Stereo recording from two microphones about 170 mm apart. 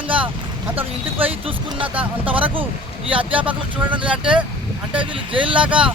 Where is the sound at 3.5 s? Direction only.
10° right (ahead or behind).